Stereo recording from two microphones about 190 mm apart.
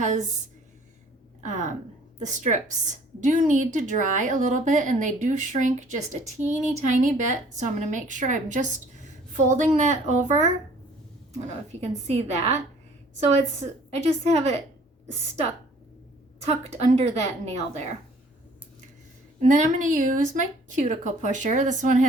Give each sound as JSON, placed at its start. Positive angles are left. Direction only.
{"t": 0.0, "sound": "speech", "side_deg": -40}
{"t": 1.4, "sound": "speech", "side_deg": -40}
{"t": 11.7, "sound": "speech", "side_deg": -35}
{"t": 16.5, "sound": "speech", "side_deg": -35}
{"t": 19.5, "sound": "speech", "side_deg": -40}